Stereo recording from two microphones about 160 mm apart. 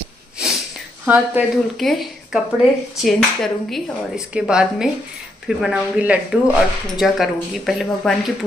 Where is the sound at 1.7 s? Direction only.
Centre (ahead or behind).